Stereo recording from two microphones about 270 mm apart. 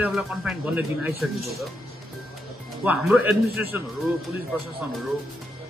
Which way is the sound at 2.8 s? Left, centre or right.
Centre.